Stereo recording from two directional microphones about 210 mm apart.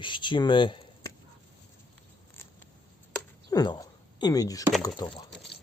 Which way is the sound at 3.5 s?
20° left (ahead or behind).